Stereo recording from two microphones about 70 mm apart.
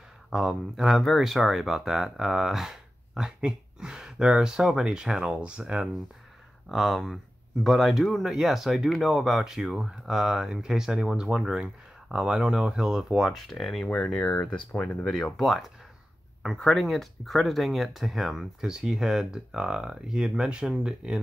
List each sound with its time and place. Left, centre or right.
0.3 s speech: centre
6.7 s speech: centre
13.8 s speech: centre
15.0 s speech: centre